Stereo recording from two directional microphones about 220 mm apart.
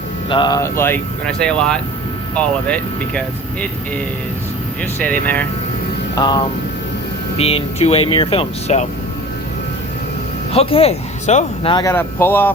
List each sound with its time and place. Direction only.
0.3 s speech: 20° left (ahead or behind)
5.2 s speech: 10° left (ahead or behind)
6.1 s speech: 20° left (ahead or behind)
10.5 s speech: 25° left (ahead or behind); by 12.5 s 10° left (ahead or behind)